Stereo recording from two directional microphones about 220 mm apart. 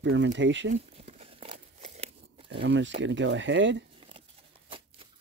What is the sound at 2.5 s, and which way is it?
Speech, 55° right (ahead or behind).